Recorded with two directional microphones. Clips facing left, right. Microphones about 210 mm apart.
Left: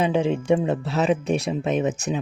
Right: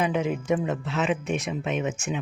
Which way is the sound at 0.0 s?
30° left (ahead or behind).